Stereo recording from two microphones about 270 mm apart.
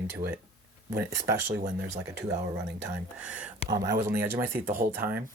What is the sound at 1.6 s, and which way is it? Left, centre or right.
Speech, right.